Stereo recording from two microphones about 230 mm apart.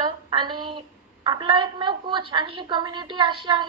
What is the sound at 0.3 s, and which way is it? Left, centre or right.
A woman's voice, right.